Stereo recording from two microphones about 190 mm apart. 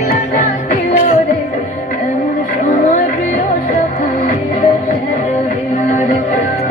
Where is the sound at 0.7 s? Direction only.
35° left (ahead or behind).